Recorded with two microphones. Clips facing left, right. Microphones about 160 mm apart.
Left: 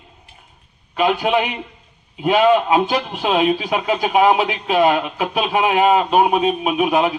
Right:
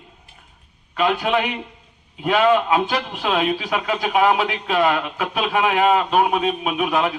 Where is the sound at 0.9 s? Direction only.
15° left (ahead or behind).